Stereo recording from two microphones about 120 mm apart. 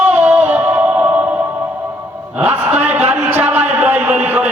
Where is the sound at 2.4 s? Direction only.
15° right (ahead or behind).